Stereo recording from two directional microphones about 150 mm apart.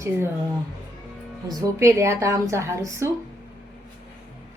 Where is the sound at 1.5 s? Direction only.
20° right (ahead or behind).